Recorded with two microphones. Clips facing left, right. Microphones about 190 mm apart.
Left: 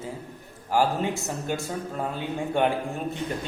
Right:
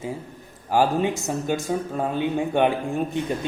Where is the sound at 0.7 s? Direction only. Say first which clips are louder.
Right 3 dB; 15° right (ahead or behind).